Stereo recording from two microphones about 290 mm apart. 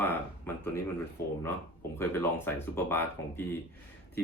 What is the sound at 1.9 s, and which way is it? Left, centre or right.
Speech, centre.